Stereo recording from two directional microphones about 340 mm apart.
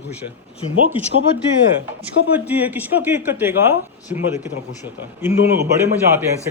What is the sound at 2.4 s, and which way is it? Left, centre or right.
A man's voice, centre.